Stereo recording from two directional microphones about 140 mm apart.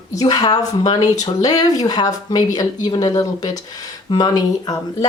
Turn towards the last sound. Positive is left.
turn(degrees=25)  # may be behind; listen again after turning